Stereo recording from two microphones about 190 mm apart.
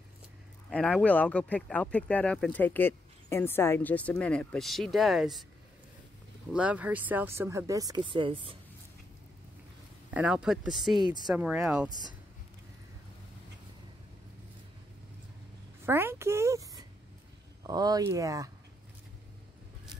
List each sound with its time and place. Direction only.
0.7 s speech: 5° left (ahead or behind)
6.5 s speech: 5° right (ahead or behind); by 8.5 s 25° right (ahead or behind)
10.1 s speech: 5° right (ahead or behind)
15.8 s speech: 10° right (ahead or behind)